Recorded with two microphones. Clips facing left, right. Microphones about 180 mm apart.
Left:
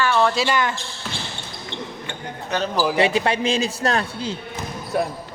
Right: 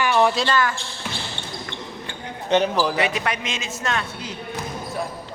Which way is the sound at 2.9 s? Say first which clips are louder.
Left 4 dB; 30° left (ahead or behind).